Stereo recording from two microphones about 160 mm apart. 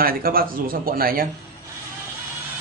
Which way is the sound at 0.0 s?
65° right (ahead or behind).